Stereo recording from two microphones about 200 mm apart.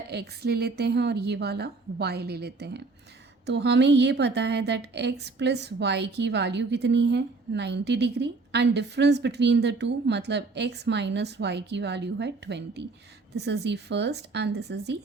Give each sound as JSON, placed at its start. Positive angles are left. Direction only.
{"t": 0.1, "sound": "a woman's voice", "side_deg": -55}